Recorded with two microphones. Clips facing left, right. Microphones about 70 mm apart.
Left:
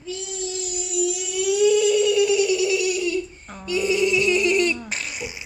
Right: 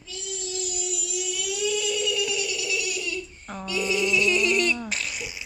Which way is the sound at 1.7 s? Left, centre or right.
Left.